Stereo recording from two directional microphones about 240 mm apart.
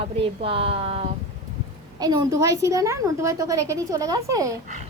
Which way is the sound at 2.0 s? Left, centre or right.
Centre.